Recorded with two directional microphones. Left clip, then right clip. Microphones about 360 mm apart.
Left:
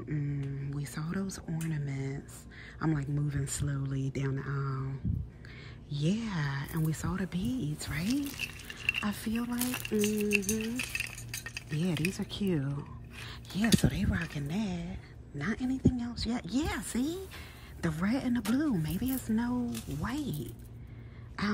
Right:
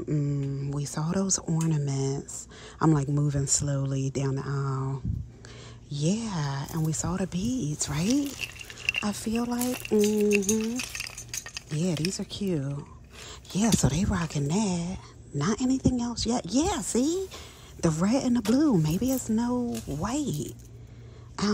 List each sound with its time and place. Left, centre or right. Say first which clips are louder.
0.1 s mantra: right 7 dB; centre
1.7 s a woman's voice: right 9 dB; centre
21.4 s a sound: right 5 dB; centre